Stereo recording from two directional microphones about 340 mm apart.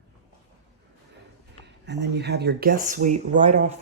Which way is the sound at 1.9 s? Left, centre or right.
Right.